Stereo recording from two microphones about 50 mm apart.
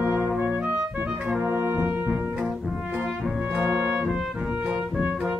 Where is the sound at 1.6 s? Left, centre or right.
Right.